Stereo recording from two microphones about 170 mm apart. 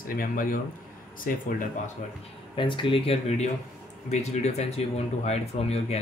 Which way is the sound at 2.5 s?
30° left (ahead or behind).